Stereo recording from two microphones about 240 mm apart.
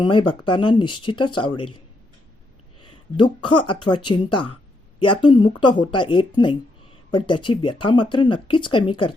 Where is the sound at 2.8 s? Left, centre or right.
Centre.